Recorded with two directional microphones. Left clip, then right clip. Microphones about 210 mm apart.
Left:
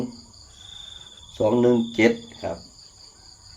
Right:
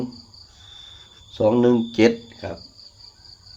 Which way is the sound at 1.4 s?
40° right (ahead or behind).